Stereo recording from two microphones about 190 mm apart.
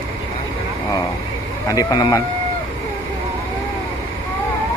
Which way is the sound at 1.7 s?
20° left (ahead or behind).